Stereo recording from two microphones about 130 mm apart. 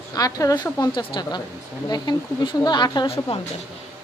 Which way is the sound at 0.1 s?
25° left (ahead or behind).